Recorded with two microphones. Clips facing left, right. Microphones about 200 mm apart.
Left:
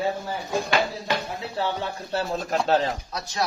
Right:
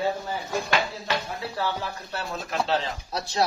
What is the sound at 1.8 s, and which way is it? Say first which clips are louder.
Speech: left 5 dB; 30° left (ahead or behind).